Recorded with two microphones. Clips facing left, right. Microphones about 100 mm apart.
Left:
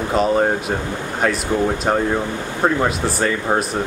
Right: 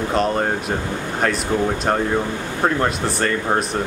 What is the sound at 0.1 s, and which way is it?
Speech, centre (ahead or behind).